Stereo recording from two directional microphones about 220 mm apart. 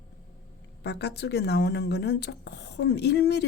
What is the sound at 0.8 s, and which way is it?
Speech, 50° left (ahead or behind).